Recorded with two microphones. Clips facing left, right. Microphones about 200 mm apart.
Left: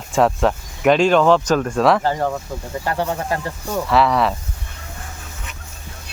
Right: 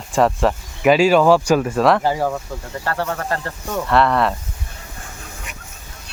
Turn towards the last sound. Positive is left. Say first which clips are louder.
# even
turn(degrees=0)  # may be behind; listen again after turning